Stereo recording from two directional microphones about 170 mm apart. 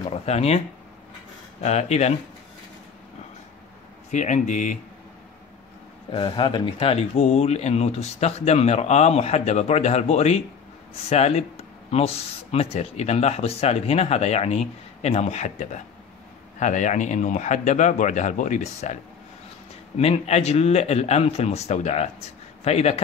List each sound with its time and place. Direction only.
0.1 s speech: 40° left (ahead or behind)
1.6 s speech: 40° left (ahead or behind)
4.1 s speech: 45° left (ahead or behind)
6.1 s speech: 30° left (ahead or behind)
20.0 s speech: 40° left (ahead or behind)